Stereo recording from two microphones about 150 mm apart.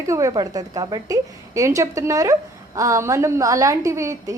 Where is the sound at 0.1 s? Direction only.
20° right (ahead or behind).